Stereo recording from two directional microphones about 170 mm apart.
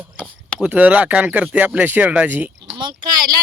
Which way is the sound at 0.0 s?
5° right (ahead or behind).